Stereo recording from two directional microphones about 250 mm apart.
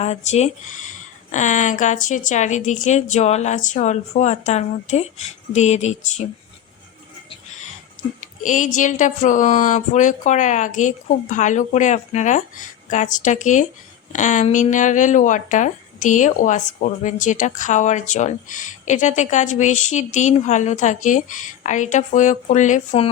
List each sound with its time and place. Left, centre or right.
0.0 s speech: left
8.2 s speech: left